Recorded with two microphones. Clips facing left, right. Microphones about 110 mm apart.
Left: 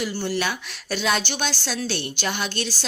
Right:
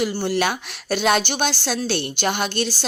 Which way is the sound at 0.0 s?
50° right (ahead or behind).